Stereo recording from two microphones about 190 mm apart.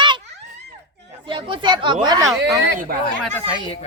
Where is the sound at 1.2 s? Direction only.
25° right (ahead or behind).